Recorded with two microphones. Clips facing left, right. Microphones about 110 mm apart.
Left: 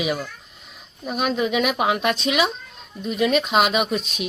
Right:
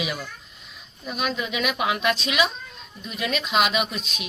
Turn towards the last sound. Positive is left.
turn(degrees=45)  # may be behind; listen again after turning